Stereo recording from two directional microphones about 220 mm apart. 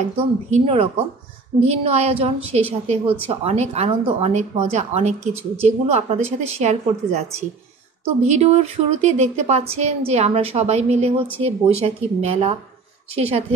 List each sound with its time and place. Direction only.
0.5 s speech: 25° right (ahead or behind)